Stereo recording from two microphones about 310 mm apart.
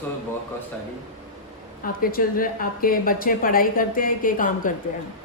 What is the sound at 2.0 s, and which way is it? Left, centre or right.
Speech, left.